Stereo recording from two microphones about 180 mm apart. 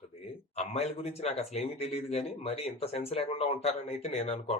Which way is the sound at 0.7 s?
35° left (ahead or behind).